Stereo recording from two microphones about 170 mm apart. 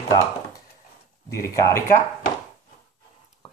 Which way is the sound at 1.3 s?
20° left (ahead or behind).